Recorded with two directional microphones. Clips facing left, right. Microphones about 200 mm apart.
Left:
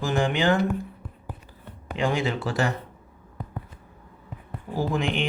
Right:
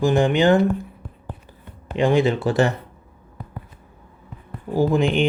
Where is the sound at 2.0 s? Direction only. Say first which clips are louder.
Right 8 dB; 20° right (ahead or behind).